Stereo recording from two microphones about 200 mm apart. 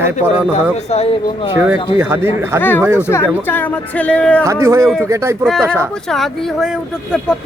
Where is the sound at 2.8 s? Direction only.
10° right (ahead or behind).